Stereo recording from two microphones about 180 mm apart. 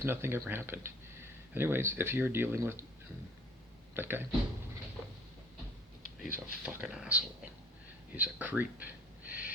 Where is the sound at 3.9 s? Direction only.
10° right (ahead or behind).